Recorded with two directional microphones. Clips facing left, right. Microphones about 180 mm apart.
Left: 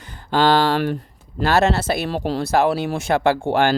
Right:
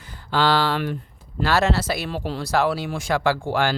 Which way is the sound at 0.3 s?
50° left (ahead or behind).